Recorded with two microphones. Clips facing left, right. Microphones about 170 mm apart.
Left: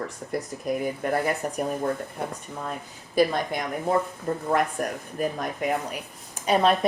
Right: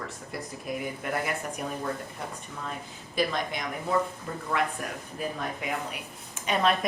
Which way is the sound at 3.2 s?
40° left (ahead or behind).